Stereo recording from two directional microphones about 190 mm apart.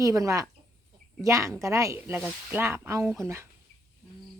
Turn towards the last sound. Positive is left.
turn(degrees=-15)  # may be behind; listen again after turning